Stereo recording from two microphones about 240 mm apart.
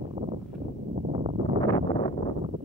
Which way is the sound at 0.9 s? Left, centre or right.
Right.